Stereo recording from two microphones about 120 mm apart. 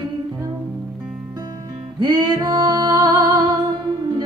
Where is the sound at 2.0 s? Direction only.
40° right (ahead or behind).